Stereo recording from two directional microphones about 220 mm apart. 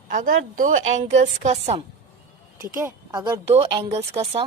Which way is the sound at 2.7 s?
15° right (ahead or behind).